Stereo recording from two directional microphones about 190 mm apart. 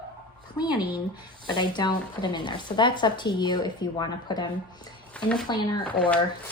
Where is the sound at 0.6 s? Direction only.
20° left (ahead or behind).